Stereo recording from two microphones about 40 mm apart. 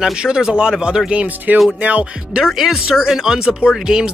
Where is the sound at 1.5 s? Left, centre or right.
Right.